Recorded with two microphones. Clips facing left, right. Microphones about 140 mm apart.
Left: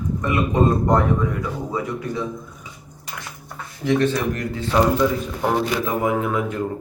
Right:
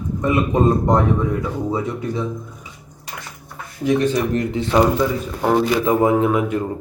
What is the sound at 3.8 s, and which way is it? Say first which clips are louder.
Speech: right 2 dB; 15° right (ahead or behind).